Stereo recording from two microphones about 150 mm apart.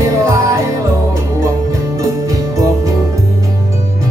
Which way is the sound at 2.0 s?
25° right (ahead or behind).